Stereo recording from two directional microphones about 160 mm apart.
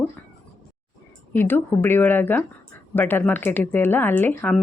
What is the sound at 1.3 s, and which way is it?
A woman's voice, 10° left (ahead or behind).